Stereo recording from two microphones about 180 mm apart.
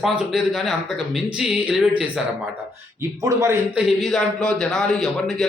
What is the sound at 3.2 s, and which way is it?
Speech, 15° right (ahead or behind).